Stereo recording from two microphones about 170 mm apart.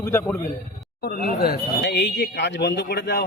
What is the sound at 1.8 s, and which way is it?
Speech, 80° left.